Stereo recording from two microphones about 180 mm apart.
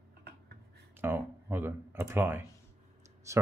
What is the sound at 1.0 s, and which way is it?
Speech, 10° right (ahead or behind).